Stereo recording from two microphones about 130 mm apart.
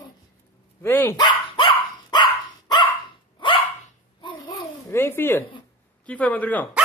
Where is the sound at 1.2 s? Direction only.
40° left (ahead or behind).